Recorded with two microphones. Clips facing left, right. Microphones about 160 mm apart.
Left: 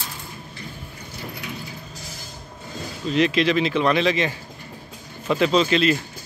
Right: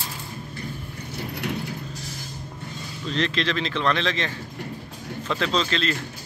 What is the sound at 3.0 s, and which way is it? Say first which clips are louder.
Speech: left 6 dB; 10° left (ahead or behind).